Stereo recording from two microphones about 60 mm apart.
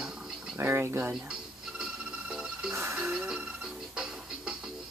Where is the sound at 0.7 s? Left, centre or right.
Right.